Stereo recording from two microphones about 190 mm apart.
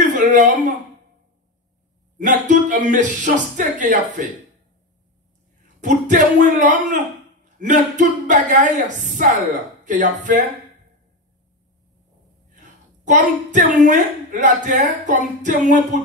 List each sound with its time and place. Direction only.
0.0 s a sound: 40° right (ahead or behind)
2.1 s speech: 40° right (ahead or behind)
5.8 s speech: 40° right (ahead or behind)
12.5 s a woman's voice: 40° right (ahead or behind)